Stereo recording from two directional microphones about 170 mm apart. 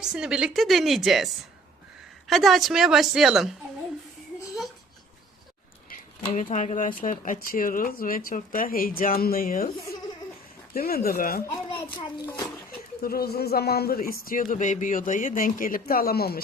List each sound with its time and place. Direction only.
0.0 s a woman's voice: 5° right (ahead or behind)
6.3 s speech: 45° left (ahead or behind)
10.8 s speech: 60° left (ahead or behind)
11.7 s a child's voice: 25° left (ahead or behind)
13.0 s speech: 65° left (ahead or behind)